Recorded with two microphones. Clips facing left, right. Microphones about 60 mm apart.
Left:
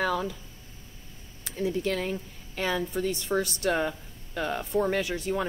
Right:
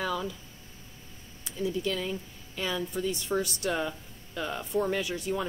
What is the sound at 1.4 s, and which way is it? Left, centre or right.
Speech, left.